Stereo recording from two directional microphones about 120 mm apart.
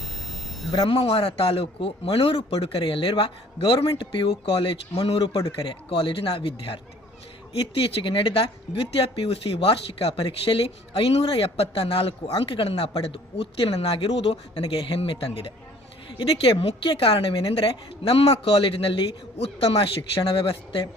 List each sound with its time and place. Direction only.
0.9 s speech: 50° left (ahead or behind)
5.5 s speech: 50° left (ahead or behind)